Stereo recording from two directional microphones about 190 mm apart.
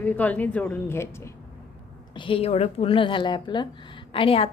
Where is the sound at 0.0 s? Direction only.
10° left (ahead or behind).